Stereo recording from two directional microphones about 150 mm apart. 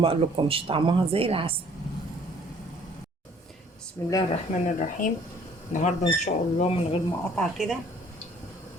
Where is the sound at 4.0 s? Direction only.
15° left (ahead or behind).